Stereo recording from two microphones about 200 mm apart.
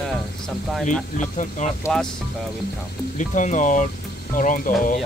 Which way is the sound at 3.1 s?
40° left (ahead or behind).